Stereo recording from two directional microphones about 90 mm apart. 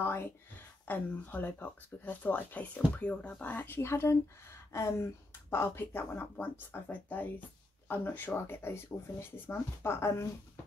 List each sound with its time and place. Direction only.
0.0 s speech: 30° left (ahead or behind)